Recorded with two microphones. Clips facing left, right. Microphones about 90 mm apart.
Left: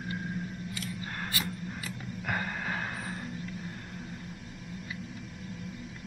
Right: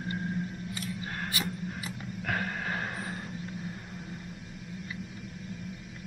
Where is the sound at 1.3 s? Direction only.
20° right (ahead or behind).